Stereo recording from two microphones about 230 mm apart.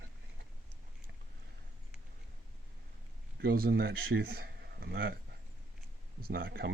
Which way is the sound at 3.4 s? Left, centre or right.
Right.